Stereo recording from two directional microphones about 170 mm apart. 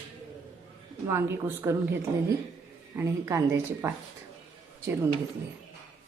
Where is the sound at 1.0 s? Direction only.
15° right (ahead or behind).